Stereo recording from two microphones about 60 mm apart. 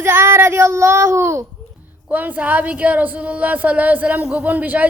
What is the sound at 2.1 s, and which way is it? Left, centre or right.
A woman's voice, right.